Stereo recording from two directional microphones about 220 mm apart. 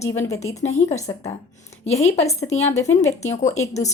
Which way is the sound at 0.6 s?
30° left (ahead or behind).